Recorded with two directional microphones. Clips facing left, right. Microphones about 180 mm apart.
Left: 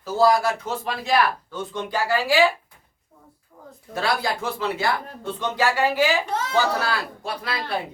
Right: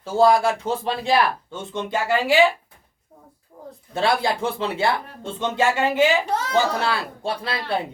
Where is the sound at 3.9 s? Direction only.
25° right (ahead or behind).